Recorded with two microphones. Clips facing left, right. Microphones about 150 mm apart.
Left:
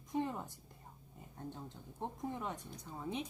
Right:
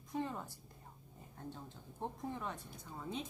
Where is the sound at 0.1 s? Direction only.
15° left (ahead or behind).